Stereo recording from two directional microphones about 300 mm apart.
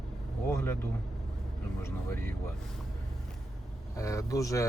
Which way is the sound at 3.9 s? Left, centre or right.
Centre.